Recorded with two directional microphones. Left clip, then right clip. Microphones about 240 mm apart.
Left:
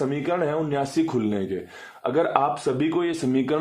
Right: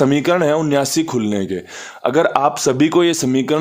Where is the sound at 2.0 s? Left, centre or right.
Right.